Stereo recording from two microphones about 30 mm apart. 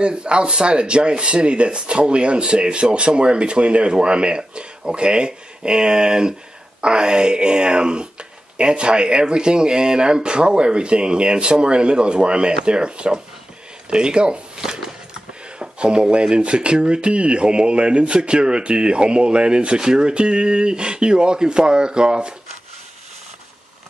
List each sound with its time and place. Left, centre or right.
0.0 s speech: right
15.6 s speech: right